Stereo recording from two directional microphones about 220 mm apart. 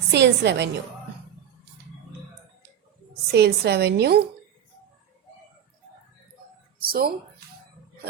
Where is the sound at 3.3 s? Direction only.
45° right (ahead or behind).